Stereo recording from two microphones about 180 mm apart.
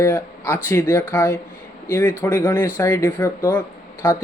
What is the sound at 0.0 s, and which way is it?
Speech, 15° left (ahead or behind).